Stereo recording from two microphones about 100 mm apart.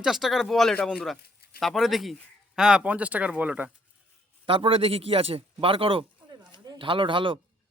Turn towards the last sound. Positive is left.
turn(degrees=-55)  # may be behind; listen again after turning